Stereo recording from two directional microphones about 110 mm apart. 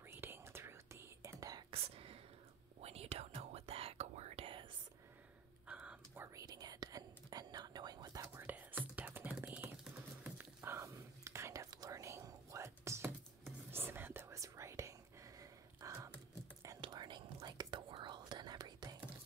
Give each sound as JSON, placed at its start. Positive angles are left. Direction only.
{"t": 0.1, "sound": "whispering", "side_deg": -20}
{"t": 1.7, "sound": "whispering", "side_deg": -60}
{"t": 2.8, "sound": "whispering", "side_deg": -70}
{"t": 5.7, "sound": "whispering", "side_deg": -10}
{"t": 6.2, "sound": "whispering", "side_deg": -35}
{"t": 8.3, "sound": "whispering", "side_deg": -15}
{"t": 16.8, "sound": "whispering", "side_deg": -45}